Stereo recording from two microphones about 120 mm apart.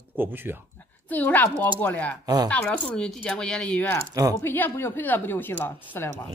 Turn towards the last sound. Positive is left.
turn(degrees=15)  # may be behind; listen again after turning